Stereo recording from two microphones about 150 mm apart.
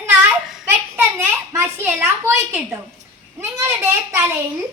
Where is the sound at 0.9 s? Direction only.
15° right (ahead or behind).